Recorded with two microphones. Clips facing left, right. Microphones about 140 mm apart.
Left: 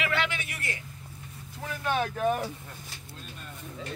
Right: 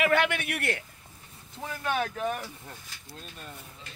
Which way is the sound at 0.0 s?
50° right (ahead or behind).